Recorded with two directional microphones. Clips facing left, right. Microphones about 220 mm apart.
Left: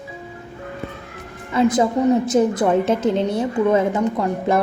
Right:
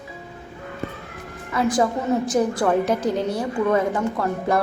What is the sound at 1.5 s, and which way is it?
Speech, 20° left (ahead or behind).